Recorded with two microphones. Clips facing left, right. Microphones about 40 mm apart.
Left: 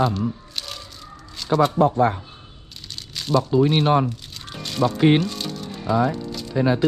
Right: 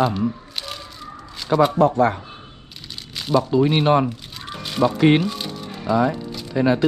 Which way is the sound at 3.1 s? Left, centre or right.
Centre.